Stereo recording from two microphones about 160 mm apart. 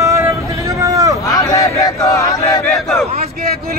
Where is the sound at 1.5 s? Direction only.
20° left (ahead or behind).